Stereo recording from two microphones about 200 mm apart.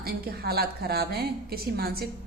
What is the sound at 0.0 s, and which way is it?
A woman's voice, 50° right (ahead or behind).